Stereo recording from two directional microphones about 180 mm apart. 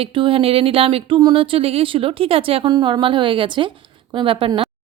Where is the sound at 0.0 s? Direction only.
30° right (ahead or behind).